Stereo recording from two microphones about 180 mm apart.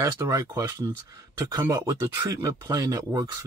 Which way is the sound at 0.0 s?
15° right (ahead or behind).